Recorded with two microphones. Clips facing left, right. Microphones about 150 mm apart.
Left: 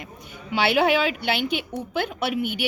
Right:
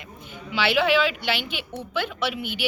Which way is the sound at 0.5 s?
45° left (ahead or behind).